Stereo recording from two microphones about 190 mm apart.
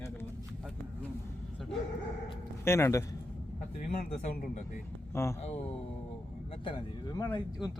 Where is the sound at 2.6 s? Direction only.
15° left (ahead or behind).